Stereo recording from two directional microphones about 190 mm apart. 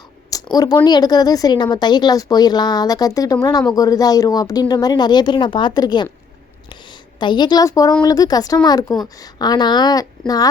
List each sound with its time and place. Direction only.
0.5 s speech: 20° left (ahead or behind)
7.2 s speech: 25° left (ahead or behind)